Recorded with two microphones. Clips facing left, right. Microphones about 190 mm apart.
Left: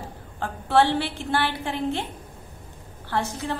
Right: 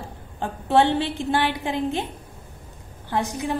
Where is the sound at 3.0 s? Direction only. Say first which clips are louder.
Right 2 dB; 15° right (ahead or behind).